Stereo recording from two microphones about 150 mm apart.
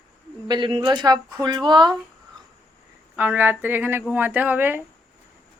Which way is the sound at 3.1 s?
10° right (ahead or behind).